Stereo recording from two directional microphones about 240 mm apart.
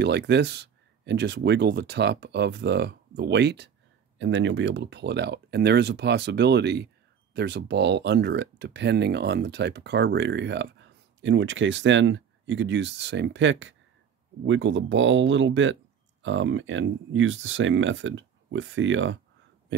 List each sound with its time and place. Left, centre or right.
0.0 s speech: right